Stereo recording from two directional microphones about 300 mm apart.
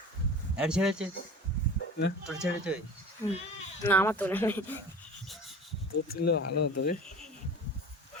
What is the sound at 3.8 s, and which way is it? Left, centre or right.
Speech, centre.